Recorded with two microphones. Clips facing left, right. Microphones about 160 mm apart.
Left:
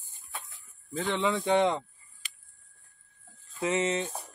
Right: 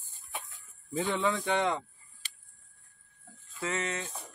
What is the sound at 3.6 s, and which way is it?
Speech, 20° left (ahead or behind).